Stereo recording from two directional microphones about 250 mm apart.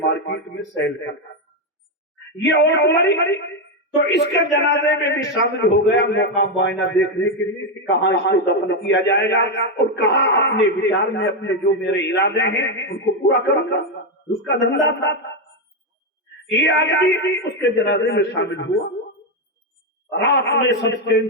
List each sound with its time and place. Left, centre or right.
0.1 s a sound: left
0.8 s a man's voice: left
2.6 s a man's voice: left
16.6 s a man's voice: left
20.1 s a man's voice: left